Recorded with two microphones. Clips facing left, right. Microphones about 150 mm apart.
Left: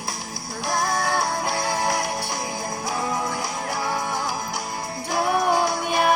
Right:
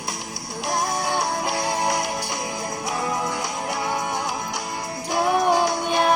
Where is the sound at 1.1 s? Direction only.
Centre (ahead or behind).